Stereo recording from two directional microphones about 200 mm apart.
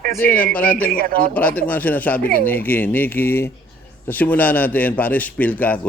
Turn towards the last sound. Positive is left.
turn(degrees=5)  # may be behind; listen again after turning